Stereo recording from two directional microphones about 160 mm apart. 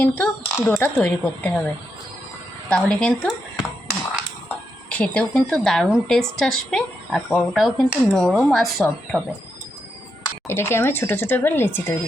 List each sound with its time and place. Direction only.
0.0 s speech: 10° left (ahead or behind)
4.9 s speech: 5° left (ahead or behind)
10.4 s speech: 15° left (ahead or behind)